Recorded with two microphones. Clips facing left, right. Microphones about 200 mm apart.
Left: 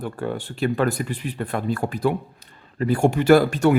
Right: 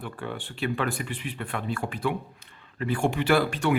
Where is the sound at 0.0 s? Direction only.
40° left (ahead or behind).